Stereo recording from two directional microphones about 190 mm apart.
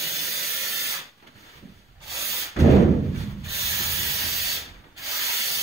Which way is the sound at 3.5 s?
15° right (ahead or behind).